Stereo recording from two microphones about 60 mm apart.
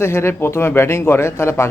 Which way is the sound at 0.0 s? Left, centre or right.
Left.